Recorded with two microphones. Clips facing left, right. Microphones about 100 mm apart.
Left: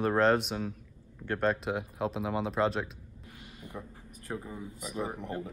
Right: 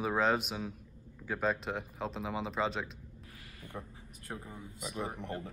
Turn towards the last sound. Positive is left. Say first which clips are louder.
# left 3 dB
turn(degrees=30)  # may be behind; listen again after turning